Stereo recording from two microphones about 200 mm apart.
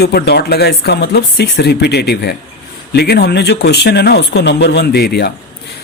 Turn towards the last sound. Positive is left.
turn(degrees=50)  # may be behind; listen again after turning